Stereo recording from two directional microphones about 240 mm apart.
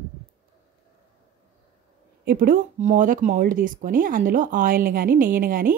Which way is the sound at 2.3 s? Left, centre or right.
Right.